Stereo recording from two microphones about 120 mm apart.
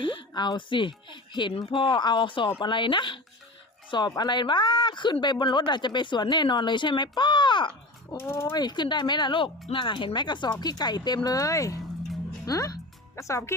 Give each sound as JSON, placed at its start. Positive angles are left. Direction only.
{"t": 0.0, "sound": "speech", "side_deg": 45}
{"t": 8.2, "sound": "speech", "side_deg": 20}
{"t": 8.4, "sound": "speech", "side_deg": 35}